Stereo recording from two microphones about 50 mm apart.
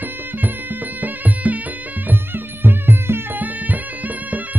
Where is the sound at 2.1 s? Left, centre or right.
Right.